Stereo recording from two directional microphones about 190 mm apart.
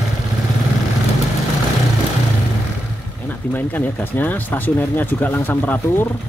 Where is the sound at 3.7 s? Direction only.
10° left (ahead or behind).